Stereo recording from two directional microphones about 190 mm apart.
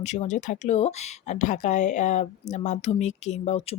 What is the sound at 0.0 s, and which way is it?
Speech, 35° left (ahead or behind).